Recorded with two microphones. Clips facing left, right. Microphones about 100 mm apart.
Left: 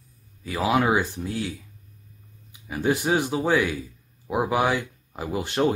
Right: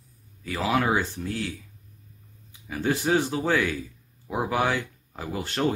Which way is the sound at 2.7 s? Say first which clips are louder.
Left 1 dB; 15° left (ahead or behind).